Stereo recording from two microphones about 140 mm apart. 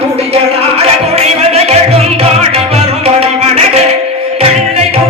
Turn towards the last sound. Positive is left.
turn(degrees=-45)  # may be behind; listen again after turning